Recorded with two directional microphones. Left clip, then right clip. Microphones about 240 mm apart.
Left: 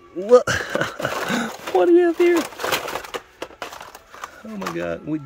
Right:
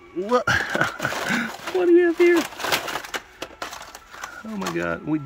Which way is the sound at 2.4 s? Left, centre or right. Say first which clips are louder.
Left 1 dB; left.